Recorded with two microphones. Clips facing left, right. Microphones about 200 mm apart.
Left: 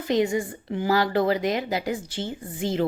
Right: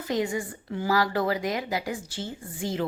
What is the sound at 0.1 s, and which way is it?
A woman's voice, 20° left (ahead or behind).